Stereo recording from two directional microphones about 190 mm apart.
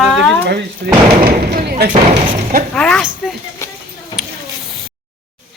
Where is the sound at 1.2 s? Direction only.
55° right (ahead or behind).